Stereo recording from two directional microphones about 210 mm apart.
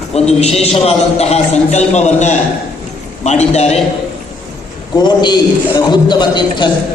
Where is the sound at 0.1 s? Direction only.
30° left (ahead or behind).